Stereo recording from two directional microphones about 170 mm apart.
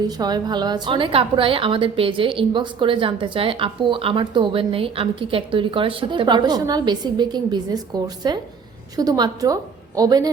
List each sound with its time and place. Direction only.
0.2 s a woman's voice: 25° right (ahead or behind)